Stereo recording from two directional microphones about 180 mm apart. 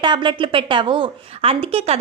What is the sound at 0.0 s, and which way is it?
A woman's voice, 25° right (ahead or behind).